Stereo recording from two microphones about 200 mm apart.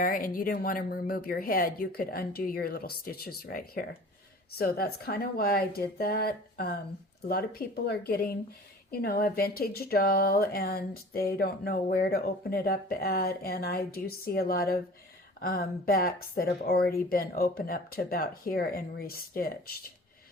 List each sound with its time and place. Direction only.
0.0 s speech: 45° left (ahead or behind)